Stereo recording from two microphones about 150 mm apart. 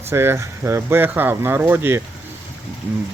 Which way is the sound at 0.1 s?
15° right (ahead or behind).